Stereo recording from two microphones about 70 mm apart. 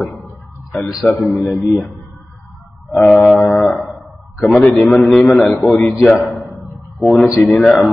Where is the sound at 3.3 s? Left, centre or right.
Centre.